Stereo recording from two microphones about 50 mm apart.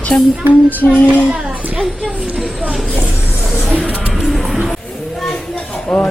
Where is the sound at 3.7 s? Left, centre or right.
Right.